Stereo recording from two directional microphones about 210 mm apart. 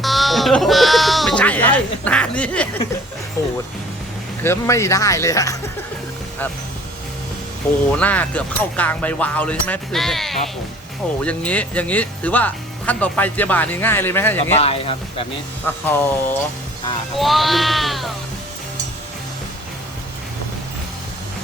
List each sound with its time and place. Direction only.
0.0 s sheep: centre (ahead or behind)
4.4 s speech: 15° left (ahead or behind)
7.9 s speech: 5° left (ahead or behind)
14.5 s speech: 30° left (ahead or behind)
15.6 s speech: 10° left (ahead or behind)